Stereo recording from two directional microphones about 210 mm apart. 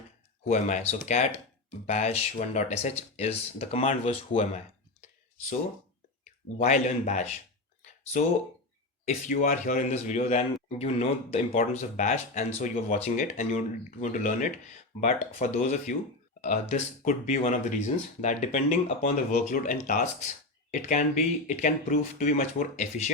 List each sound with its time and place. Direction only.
0.4 s speech: 30° left (ahead or behind)
6.6 s speech: 35° left (ahead or behind)
9.0 s speech: 35° left (ahead or behind)